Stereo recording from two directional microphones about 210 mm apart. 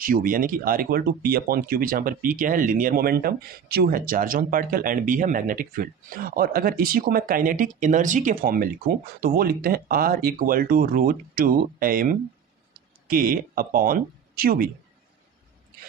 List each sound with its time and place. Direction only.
0.0 s speech: 40° right (ahead or behind)